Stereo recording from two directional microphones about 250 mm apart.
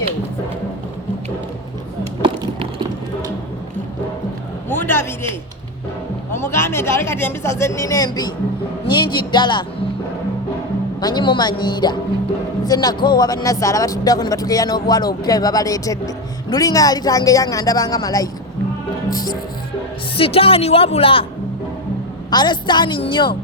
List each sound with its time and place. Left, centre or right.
2.2 s a sound: centre
4.7 s vehicle: centre
6.3 s a woman's voice: centre
11.0 s speech: centre
22.3 s speech: centre